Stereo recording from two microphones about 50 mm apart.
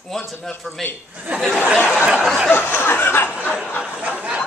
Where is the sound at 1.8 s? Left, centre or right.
Centre.